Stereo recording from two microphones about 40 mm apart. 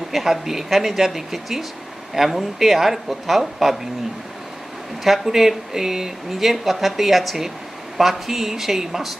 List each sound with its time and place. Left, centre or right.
0.1 s speech: centre
5.0 s speech: centre